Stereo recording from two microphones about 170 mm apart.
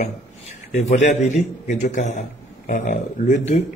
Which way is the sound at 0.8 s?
45° left (ahead or behind).